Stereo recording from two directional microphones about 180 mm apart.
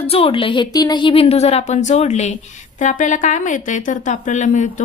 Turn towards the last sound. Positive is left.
turn(degrees=45)  # may be behind; listen again after turning